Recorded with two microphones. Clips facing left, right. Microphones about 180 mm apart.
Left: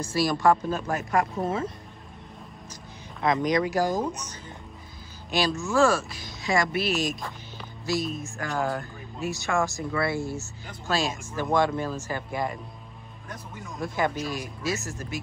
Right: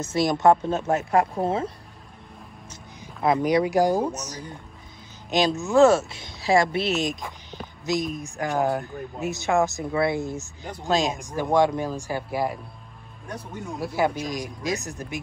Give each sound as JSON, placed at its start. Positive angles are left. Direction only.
{"t": 0.0, "sound": "speech", "side_deg": -25}
{"t": 3.2, "sound": "speech", "side_deg": -10}
{"t": 5.3, "sound": "speech", "side_deg": -20}
{"t": 13.7, "sound": "speech", "side_deg": -10}